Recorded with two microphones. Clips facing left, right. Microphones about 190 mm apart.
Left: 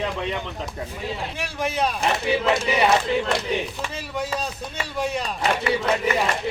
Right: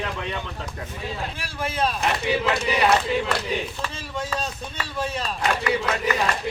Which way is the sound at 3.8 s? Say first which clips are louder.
Left 2 dB; 10° left (ahead or behind).